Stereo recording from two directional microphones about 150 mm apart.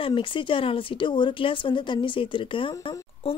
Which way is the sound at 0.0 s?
35° left (ahead or behind).